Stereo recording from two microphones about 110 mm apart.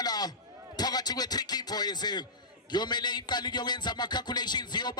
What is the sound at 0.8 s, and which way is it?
A man's voice, 35° left (ahead or behind).